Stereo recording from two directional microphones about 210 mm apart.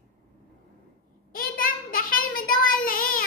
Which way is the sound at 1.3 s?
45° left (ahead or behind).